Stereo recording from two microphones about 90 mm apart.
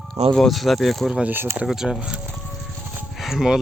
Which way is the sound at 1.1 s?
10° right (ahead or behind).